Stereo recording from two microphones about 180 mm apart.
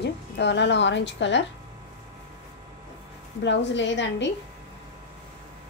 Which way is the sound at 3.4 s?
80° left.